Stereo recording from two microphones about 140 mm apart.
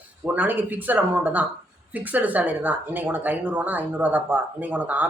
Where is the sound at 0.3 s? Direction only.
15° right (ahead or behind).